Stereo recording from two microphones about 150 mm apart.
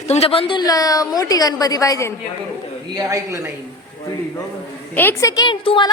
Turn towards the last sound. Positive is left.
turn(degrees=35)  # may be behind; listen again after turning